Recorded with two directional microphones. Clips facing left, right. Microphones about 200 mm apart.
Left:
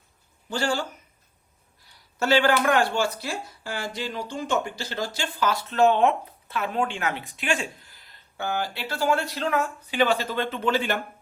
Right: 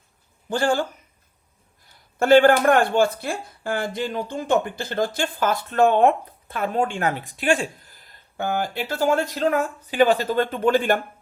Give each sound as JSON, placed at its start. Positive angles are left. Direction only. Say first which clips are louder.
{"t": 0.5, "sound": "speech", "louder": "right 5 dB", "side_deg": -50}